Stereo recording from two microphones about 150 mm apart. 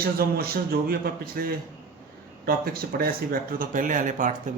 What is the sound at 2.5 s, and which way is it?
Speech, 80° right.